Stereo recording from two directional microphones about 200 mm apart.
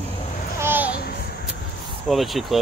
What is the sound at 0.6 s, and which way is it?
Babbling, 10° right (ahead or behind).